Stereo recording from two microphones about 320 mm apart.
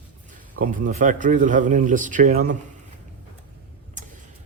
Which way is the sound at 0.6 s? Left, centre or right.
Right.